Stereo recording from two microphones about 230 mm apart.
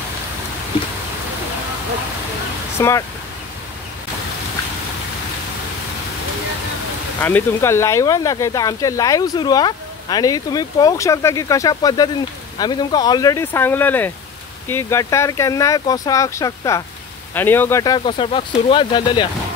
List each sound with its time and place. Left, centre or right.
2.8 s speech: centre
7.2 s speech: centre